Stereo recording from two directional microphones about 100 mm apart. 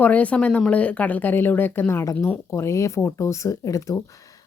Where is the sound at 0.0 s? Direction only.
15° left (ahead or behind); by 4.0 s 35° left (ahead or behind).